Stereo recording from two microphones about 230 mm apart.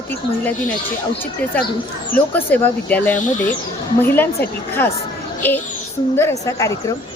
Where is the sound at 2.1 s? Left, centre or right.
Centre.